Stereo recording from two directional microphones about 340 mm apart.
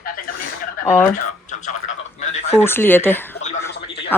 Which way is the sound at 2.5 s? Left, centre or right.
Centre.